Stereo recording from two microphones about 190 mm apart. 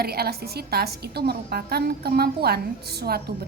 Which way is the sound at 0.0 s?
55° right (ahead or behind).